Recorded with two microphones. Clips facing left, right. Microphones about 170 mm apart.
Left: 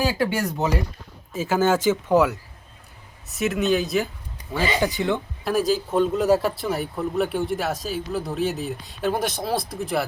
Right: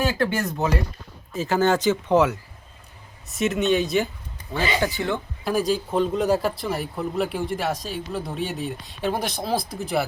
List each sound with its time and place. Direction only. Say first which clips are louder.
0.0 s speech: even; 10° left (ahead or behind)
4.5 s speech: left 1 dB; 15° left (ahead or behind)
5.5 s speech: left 1 dB; centre (ahead or behind)